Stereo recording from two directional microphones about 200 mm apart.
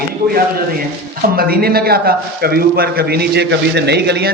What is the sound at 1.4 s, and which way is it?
A man's voice, 50° right (ahead or behind).